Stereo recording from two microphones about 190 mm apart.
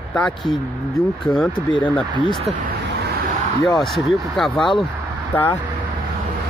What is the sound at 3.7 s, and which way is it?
Speech, centre (ahead or behind).